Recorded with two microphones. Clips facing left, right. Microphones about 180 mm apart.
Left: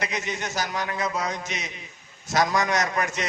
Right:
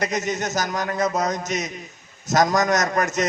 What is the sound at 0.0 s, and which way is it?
A man's voice, 45° right (ahead or behind).